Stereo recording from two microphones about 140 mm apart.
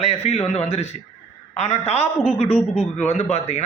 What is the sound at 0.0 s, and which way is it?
Speech, 50° left (ahead or behind).